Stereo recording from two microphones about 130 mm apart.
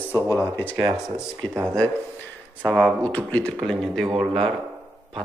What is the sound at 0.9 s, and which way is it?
Speech, 5° right (ahead or behind).